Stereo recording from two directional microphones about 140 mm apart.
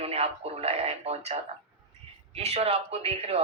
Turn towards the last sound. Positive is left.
turn(degrees=-45)  # may be behind; listen again after turning